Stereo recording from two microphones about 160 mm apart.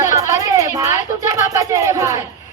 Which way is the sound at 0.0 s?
20° right (ahead or behind).